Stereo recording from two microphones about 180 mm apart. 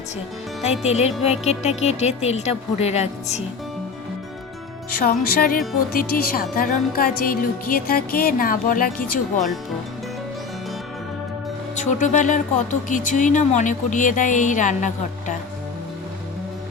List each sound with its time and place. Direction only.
0.9 s speech: 35° left (ahead or behind)
4.9 s speech: 55° left (ahead or behind)
11.8 s speech: 45° left (ahead or behind)